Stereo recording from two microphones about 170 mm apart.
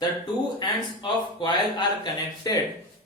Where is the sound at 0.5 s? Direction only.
25° left (ahead or behind).